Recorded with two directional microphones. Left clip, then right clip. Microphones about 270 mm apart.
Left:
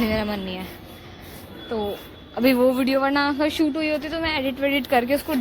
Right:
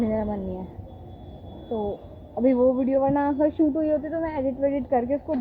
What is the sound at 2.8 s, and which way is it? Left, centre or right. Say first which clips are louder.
Speech: left 1 dB; centre.